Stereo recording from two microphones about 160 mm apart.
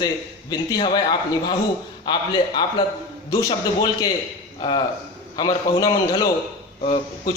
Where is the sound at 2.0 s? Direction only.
30° left (ahead or behind).